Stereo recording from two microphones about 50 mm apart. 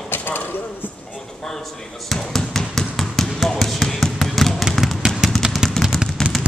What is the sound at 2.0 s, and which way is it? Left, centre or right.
Basketball bounce, centre.